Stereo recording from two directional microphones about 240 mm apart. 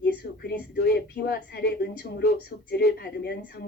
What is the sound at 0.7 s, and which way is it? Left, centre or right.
Speech, left.